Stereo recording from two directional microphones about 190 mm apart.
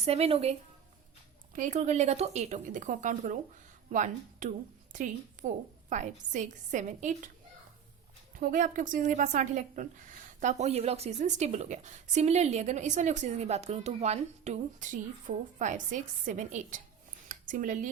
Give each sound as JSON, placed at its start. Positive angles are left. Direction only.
{"t": 0.0, "sound": "a woman's voice", "side_deg": -30}
{"t": 1.5, "sound": "a woman's voice", "side_deg": -40}
{"t": 8.4, "sound": "a woman's voice", "side_deg": -45}
{"t": 17.2, "sound": "a sound", "side_deg": -45}